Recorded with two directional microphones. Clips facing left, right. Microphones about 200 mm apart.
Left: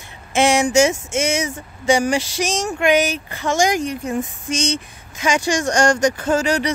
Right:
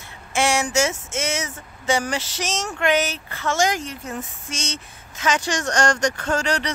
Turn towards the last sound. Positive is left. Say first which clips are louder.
# left 5 dB
turn(degrees=10)  # may be behind; listen again after turning